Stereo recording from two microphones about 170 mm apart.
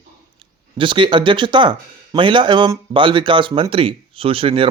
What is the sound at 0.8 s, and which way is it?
Speech, 30° right (ahead or behind).